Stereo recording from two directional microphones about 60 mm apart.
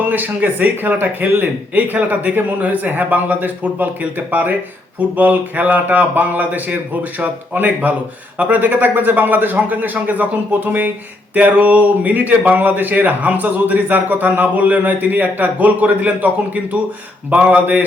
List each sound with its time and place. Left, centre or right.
0.0 s a man's voice: right